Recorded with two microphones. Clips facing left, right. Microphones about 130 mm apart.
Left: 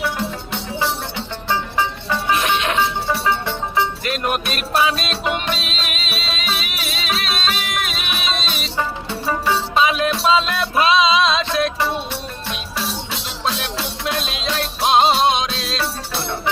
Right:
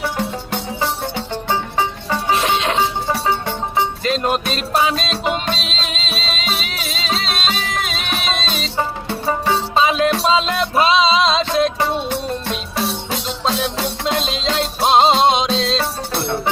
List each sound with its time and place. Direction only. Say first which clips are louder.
2.0 s music: right 1 dB; 30° right (ahead or behind)
12.7 s music: right 4 dB; 50° right (ahead or behind)
14.0 s music: right 4 dB; 25° right (ahead or behind)